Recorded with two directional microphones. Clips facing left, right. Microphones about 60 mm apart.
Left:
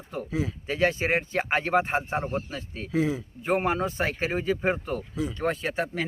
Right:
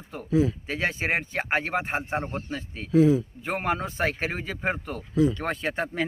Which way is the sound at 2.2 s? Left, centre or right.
Right.